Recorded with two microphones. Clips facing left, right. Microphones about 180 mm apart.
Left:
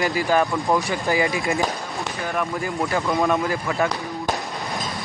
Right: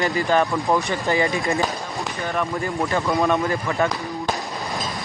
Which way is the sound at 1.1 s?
15° left (ahead or behind).